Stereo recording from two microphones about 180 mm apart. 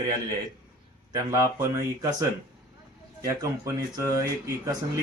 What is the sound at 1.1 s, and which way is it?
Speech, 20° right (ahead or behind).